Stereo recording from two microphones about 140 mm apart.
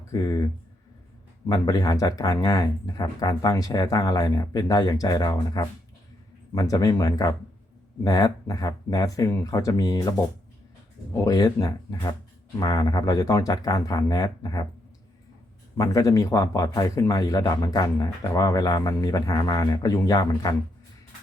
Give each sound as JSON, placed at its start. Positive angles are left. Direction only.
{"t": 0.1, "sound": "speech", "side_deg": 25}
{"t": 11.2, "sound": "speech", "side_deg": 25}
{"t": 15.8, "sound": "speech", "side_deg": 25}